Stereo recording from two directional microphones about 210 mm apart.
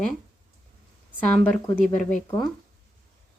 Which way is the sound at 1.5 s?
10° left (ahead or behind).